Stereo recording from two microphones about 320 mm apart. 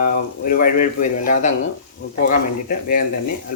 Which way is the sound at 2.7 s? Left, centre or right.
Left.